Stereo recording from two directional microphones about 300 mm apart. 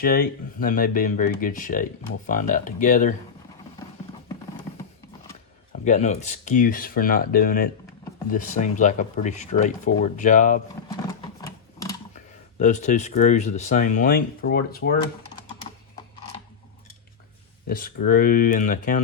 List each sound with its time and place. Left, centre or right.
0.0 s speech: left
5.8 s speech: left
10.8 s a sound: centre
12.5 s speech: left
17.7 s speech: left